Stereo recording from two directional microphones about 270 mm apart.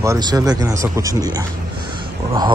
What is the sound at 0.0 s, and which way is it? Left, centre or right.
Speech, centre.